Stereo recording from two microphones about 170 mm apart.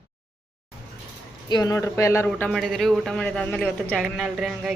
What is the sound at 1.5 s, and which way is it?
Speech, 20° left (ahead or behind).